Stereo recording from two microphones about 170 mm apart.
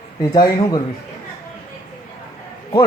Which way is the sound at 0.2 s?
25° left (ahead or behind).